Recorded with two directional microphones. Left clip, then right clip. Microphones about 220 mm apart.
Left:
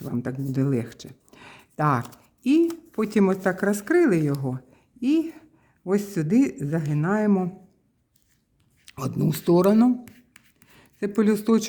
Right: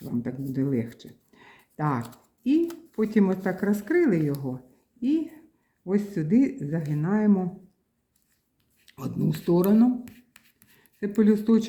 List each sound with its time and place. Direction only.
0.0 s a woman's voice: 40° left (ahead or behind)
8.9 s speech: 40° left (ahead or behind)
10.0 s a sound: centre (ahead or behind)
10.8 s speech: 45° left (ahead or behind)